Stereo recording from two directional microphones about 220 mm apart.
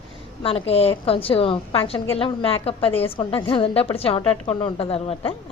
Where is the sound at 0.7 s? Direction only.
25° left (ahead or behind).